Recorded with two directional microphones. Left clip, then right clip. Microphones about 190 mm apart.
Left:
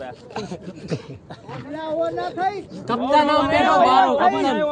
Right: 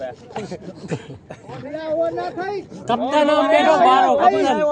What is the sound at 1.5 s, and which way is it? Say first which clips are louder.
Speech: right 3 dB; 55° left (ahead or behind).